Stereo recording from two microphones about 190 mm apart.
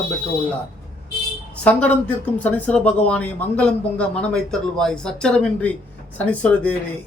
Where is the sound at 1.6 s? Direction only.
10° left (ahead or behind).